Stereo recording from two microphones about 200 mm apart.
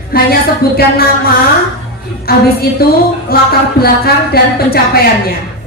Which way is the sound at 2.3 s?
50° left (ahead or behind).